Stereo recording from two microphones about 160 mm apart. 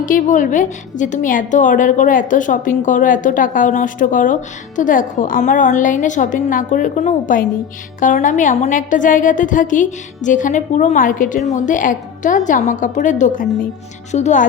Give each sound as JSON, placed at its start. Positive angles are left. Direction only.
{"t": 0.0, "sound": "a woman's voice", "side_deg": 55}